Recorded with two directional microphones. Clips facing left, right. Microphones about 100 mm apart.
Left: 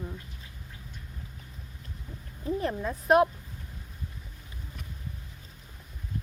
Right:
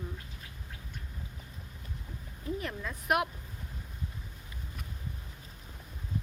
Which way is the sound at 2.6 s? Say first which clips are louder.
Left 7 dB; 35° left (ahead or behind).